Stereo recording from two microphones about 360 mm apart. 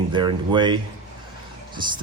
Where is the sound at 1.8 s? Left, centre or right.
Centre.